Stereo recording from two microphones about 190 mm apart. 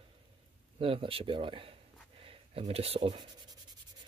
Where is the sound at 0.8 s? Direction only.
30° right (ahead or behind).